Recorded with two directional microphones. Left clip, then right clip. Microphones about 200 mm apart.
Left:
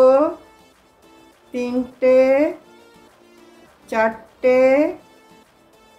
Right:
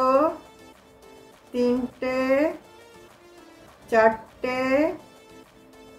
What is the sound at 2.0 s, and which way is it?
Speech, 35° left (ahead or behind).